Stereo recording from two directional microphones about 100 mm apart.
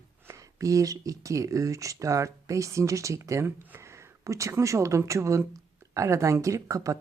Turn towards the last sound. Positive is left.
turn(degrees=-30)  # may be behind; listen again after turning